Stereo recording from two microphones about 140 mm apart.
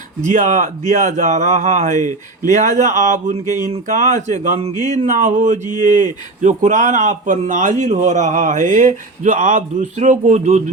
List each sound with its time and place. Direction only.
0.3 s speech: 60° right (ahead or behind)